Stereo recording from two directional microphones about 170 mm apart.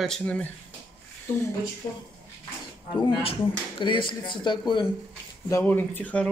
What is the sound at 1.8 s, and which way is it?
Speech, 20° left (ahead or behind).